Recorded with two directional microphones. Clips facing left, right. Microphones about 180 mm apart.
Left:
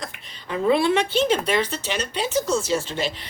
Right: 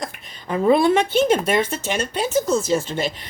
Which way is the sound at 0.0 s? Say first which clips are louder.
Right 4 dB; 45° right (ahead or behind).